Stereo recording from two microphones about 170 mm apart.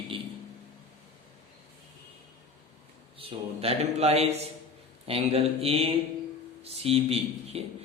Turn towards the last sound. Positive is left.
turn(degrees=-35)  # may be behind; listen again after turning